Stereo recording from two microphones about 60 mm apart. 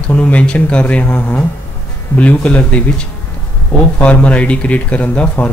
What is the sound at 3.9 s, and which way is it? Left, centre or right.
Speech, left.